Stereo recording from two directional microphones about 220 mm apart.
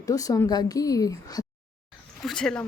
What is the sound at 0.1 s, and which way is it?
Speech, 15° left (ahead or behind).